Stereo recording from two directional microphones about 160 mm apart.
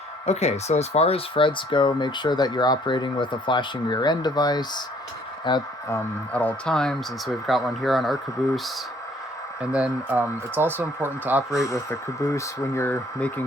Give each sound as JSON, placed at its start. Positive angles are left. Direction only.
{"t": 0.3, "sound": "speech", "side_deg": 45}
{"t": 5.9, "sound": "speech", "side_deg": 10}
{"t": 11.5, "sound": "speech", "side_deg": 20}